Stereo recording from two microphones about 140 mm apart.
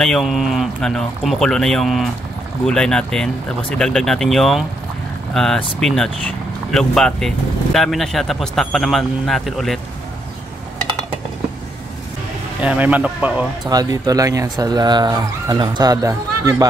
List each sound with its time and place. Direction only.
0.0 s speech: centre (ahead or behind)
12.6 s speech: 10° right (ahead or behind)
13.7 s speech: 25° right (ahead or behind)